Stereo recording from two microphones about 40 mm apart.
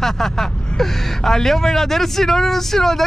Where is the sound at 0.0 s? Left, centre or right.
Centre.